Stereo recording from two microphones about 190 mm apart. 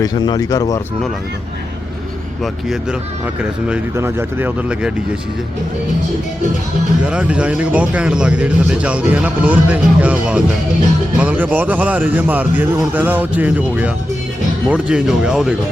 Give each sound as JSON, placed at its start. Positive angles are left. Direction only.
{"t": 0.0, "sound": "speech", "side_deg": 20}
{"t": 3.7, "sound": "speech", "side_deg": -10}
{"t": 7.0, "sound": "speech", "side_deg": -5}
{"t": 14.7, "sound": "speech", "side_deg": -5}